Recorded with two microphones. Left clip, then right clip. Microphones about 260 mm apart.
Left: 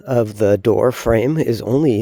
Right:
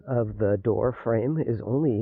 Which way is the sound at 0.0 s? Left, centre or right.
Left.